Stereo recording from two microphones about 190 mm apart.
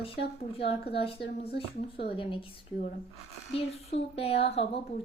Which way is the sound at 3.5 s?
30° left (ahead or behind).